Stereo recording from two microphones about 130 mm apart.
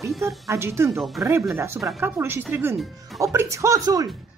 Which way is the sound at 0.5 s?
20° right (ahead or behind).